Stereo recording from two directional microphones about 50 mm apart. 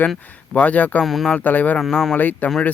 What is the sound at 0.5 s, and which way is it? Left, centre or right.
Speech, left.